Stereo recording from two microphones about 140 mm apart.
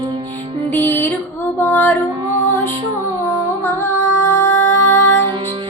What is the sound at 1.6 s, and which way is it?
Female singing, 15° left (ahead or behind).